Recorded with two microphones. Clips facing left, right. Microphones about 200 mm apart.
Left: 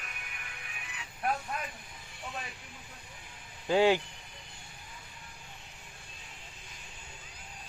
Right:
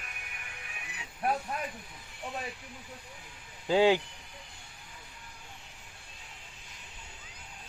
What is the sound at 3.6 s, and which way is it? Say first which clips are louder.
Speech: right 1 dB; 15° right (ahead or behind).